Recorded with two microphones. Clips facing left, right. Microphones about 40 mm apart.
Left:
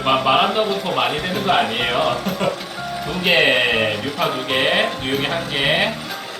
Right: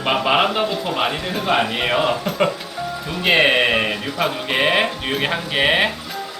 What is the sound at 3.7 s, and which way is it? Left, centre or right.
Speech, centre.